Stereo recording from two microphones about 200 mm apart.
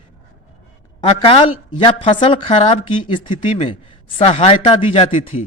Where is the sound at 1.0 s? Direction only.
25° left (ahead or behind).